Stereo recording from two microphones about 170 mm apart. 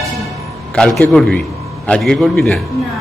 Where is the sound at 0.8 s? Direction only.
5° left (ahead or behind).